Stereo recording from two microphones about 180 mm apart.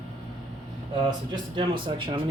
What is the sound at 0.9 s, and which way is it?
Speech, 25° right (ahead or behind).